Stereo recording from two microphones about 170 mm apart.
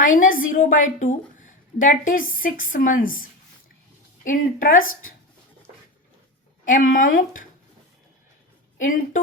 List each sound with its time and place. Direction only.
0.0 s a woman's voice: 55° left (ahead or behind)
6.7 s a woman's voice: 55° left (ahead or behind)
8.8 s a woman's voice: 50° left (ahead or behind)